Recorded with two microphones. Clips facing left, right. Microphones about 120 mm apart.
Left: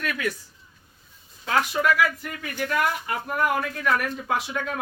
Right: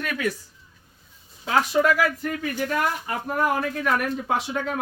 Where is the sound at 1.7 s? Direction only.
35° right (ahead or behind).